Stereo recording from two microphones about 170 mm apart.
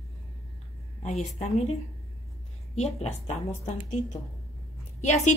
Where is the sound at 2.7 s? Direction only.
40° left (ahead or behind).